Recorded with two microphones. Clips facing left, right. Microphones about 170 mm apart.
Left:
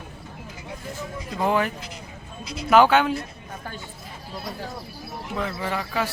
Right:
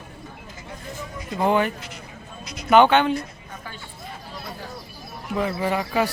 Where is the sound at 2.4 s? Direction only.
30° left (ahead or behind).